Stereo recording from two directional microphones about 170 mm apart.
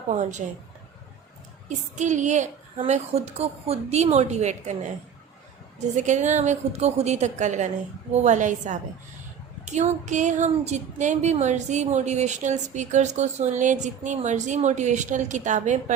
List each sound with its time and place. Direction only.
0.1 s speech: 45° right (ahead or behind)
1.6 s a woman's voice: 45° right (ahead or behind)
6.0 s speech: 45° right (ahead or behind)